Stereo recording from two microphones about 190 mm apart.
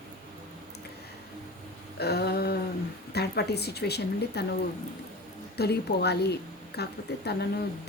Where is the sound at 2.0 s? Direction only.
60° left (ahead or behind).